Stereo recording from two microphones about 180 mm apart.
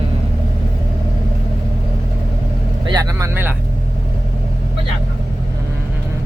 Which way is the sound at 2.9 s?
20° right (ahead or behind).